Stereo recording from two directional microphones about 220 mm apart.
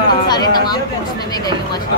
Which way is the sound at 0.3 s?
20° left (ahead or behind).